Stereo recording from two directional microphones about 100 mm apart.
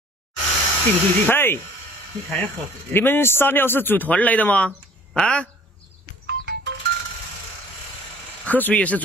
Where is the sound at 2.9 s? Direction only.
20° left (ahead or behind).